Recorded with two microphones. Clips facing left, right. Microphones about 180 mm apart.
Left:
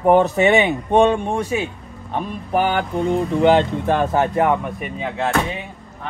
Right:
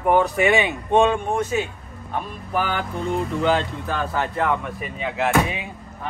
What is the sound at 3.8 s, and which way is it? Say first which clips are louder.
Speech: left 7 dB; 20° left (ahead or behind).